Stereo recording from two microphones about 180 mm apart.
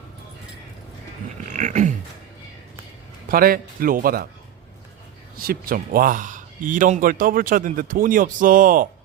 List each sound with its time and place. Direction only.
1.5 s dog: 40° right (ahead or behind)
3.2 s a man's voice: 55° right (ahead or behind)
5.4 s speech: 55° right (ahead or behind)